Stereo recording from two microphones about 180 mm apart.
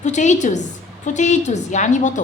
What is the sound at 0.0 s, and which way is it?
A woman's voice, 40° left (ahead or behind).